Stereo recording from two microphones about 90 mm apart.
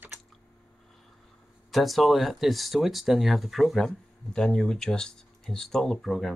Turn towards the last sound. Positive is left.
turn(degrees=0)  # may be behind; listen again after turning